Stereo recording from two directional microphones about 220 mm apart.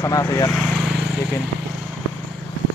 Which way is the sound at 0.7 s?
5° right (ahead or behind).